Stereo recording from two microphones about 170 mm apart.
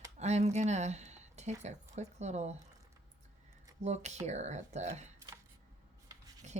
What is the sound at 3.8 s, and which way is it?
Speech, 40° right (ahead or behind).